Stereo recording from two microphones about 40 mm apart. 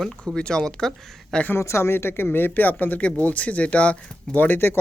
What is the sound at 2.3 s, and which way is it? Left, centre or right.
Speech, left.